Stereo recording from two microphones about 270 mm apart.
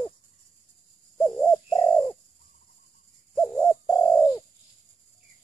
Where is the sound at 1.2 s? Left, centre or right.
Centre.